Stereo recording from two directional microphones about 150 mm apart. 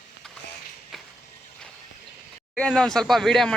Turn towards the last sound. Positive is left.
turn(degrees=5)  # may be behind; listen again after turning